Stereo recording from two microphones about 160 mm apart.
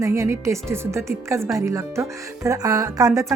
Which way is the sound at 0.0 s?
20° right (ahead or behind).